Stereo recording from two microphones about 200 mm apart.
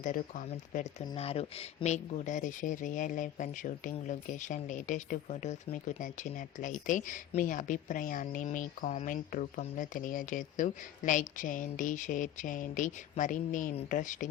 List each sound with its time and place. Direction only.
0.0 s speech: 40° left (ahead or behind)
1.0 s speech: 30° left (ahead or behind)